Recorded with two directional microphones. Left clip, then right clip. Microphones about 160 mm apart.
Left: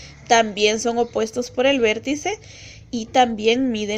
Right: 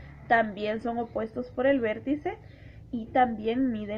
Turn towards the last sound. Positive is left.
turn(degrees=35)  # may be behind; listen again after turning